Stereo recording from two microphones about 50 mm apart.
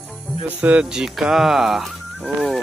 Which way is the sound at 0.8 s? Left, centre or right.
Centre.